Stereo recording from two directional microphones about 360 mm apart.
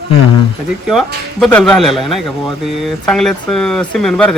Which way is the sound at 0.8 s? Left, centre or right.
Centre.